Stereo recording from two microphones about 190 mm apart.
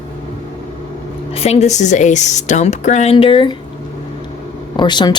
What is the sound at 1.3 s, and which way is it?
Speech, 35° left (ahead or behind).